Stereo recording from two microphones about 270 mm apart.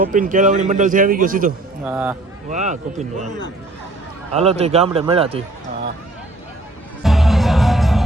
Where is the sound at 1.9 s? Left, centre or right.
Centre.